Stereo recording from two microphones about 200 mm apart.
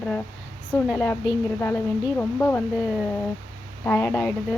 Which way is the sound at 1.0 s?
15° left (ahead or behind).